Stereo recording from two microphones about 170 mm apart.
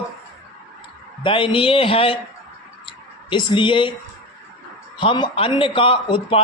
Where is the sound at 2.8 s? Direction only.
30° left (ahead or behind).